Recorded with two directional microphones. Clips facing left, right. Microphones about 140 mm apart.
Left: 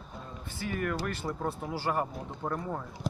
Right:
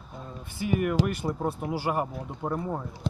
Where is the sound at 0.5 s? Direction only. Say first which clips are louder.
Right 7 dB; 15° right (ahead or behind).